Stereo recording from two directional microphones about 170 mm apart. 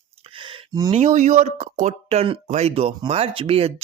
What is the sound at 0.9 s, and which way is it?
Speech, 45° right (ahead or behind).